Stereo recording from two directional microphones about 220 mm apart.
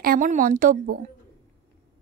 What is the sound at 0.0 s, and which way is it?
Speech, 40° right (ahead or behind).